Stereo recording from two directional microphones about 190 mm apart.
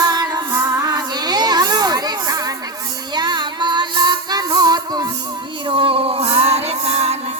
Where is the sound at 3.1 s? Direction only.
25° right (ahead or behind).